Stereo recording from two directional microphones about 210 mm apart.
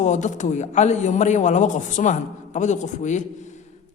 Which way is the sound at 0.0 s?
35° left (ahead or behind).